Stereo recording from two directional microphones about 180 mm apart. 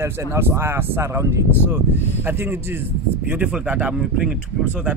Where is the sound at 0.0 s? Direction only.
15° right (ahead or behind).